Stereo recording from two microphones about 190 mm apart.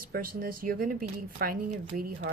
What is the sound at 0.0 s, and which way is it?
Speech, 50° right (ahead or behind).